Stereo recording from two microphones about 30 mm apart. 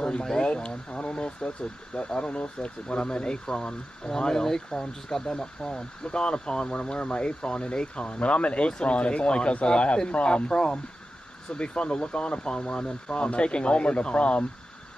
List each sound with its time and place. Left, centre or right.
0.0 s speech: left
6.7 s speech: left